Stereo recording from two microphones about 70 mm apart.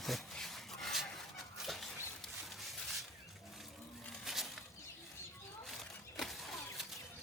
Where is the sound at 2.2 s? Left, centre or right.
Centre.